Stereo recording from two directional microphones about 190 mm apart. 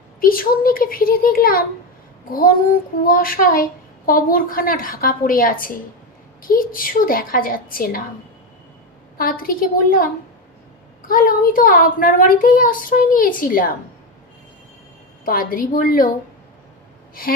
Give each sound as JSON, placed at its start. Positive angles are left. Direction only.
{"t": 0.2, "sound": "speech", "side_deg": 50}
{"t": 9.1, "sound": "speech", "side_deg": 50}
{"t": 15.2, "sound": "speech", "side_deg": 50}
{"t": 17.2, "sound": "speech", "side_deg": 50}